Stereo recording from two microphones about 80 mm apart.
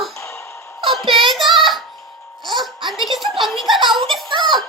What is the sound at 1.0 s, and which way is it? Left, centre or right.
Child singing, right.